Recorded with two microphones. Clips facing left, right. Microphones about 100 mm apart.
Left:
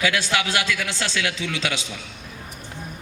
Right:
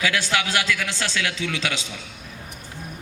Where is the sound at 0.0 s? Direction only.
20° left (ahead or behind).